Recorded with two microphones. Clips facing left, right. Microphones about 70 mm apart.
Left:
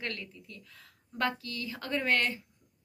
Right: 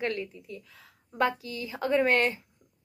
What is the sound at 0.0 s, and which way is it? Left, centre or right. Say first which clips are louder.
A woman's voice: right 8 dB; right.